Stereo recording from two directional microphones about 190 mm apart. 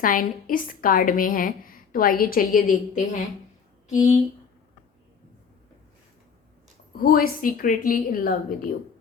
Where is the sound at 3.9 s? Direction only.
40° left (ahead or behind).